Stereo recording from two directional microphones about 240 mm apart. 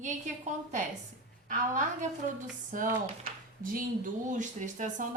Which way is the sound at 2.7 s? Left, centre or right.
Right.